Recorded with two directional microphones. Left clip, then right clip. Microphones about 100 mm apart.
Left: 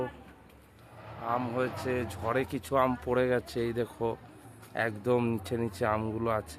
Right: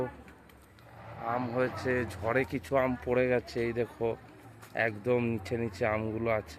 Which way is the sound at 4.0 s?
35° left (ahead or behind).